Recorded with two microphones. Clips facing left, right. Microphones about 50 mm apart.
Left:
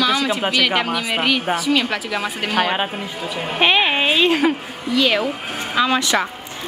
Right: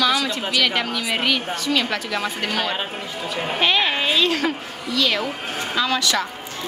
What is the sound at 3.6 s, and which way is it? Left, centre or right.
A woman's voice, left.